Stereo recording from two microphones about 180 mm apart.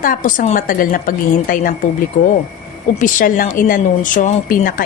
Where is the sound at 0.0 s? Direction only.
50° left (ahead or behind).